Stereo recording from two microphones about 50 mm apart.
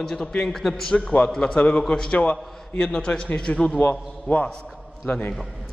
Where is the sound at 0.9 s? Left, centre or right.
Left.